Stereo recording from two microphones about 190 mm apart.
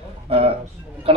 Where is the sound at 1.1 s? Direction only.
30° right (ahead or behind).